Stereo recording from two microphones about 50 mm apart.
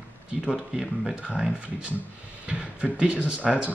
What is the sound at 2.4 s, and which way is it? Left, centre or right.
Speech, right.